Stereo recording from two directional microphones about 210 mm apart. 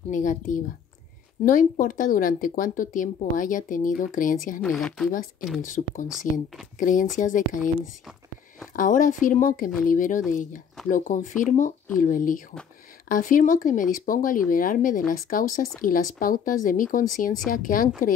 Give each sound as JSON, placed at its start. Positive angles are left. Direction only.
{"t": 0.1, "sound": "speech", "side_deg": 40}
{"t": 4.6, "sound": "speech", "side_deg": 0}
{"t": 5.6, "sound": "speech", "side_deg": 40}
{"t": 8.7, "sound": "speech", "side_deg": 40}